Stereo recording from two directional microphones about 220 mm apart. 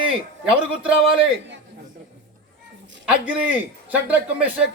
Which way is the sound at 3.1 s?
5° right (ahead or behind).